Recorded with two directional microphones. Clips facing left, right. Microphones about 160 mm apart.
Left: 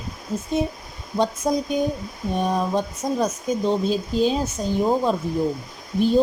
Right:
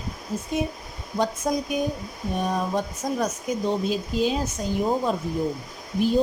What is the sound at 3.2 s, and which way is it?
Speech, 30° left (ahead or behind).